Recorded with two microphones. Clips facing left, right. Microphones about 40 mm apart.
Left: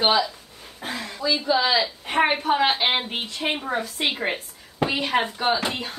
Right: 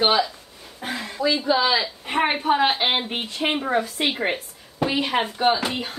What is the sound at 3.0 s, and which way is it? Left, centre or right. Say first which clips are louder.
Speech: right 2 dB; centre.